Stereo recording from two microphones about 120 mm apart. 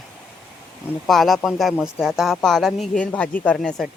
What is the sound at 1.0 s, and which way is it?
Speech, centre (ahead or behind).